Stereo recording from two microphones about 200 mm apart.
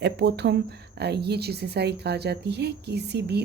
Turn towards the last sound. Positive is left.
turn(degrees=-55)  # may be behind; listen again after turning